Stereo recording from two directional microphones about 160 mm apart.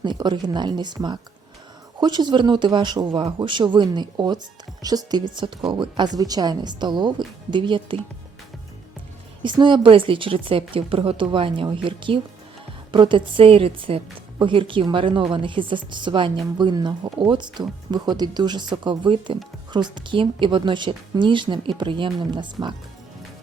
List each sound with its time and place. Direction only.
0.0 s a woman's voice: 30° right (ahead or behind)
9.4 s a woman's voice: 30° right (ahead or behind)